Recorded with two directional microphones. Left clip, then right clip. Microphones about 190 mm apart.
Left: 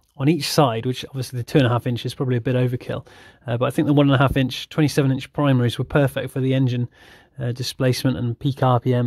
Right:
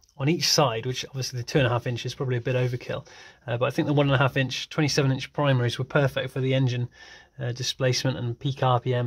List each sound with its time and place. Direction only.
0.2 s speech: 35° left (ahead or behind)